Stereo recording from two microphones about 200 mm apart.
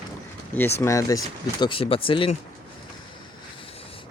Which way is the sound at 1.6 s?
25° left (ahead or behind).